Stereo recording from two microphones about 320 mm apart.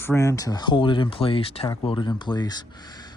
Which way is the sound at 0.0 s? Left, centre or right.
Centre.